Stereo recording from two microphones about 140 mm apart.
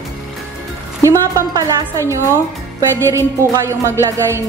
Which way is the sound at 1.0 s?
25° right (ahead or behind).